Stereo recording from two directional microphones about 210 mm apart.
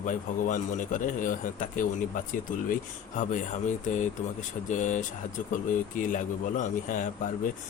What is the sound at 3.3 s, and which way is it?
Speech, 35° left (ahead or behind).